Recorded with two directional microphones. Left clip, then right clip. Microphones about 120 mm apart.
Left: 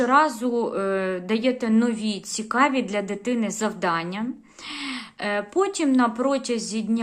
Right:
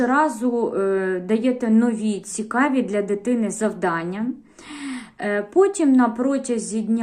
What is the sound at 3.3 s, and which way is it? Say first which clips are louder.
Speech: right 3 dB; 25° left (ahead or behind).